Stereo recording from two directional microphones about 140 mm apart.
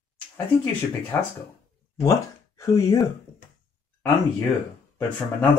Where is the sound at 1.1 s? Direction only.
15° left (ahead or behind).